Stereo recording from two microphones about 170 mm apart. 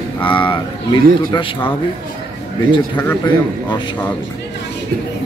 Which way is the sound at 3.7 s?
25° left (ahead or behind).